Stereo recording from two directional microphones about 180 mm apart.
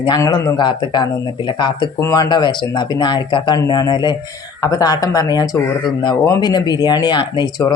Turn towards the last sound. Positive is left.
turn(degrees=25)  # may be behind; listen again after turning